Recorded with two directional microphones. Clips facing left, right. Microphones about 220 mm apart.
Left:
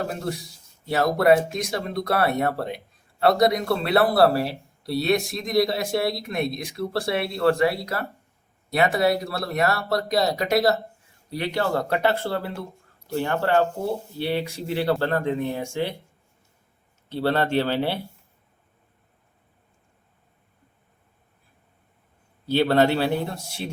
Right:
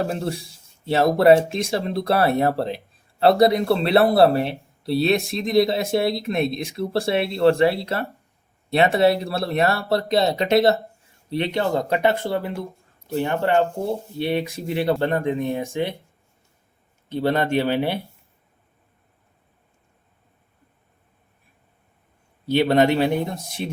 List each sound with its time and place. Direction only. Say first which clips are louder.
0.1 s speech: right 3 dB; 30° right (ahead or behind)
17.1 s speech: right 2 dB; 15° right (ahead or behind)
22.4 s speech: right 2 dB; 15° right (ahead or behind)